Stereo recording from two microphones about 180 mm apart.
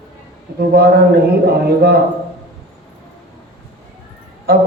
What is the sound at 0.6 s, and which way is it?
Speech, 60° right (ahead or behind).